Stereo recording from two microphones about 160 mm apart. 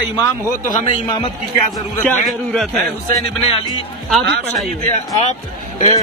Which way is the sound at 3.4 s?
35° left (ahead or behind).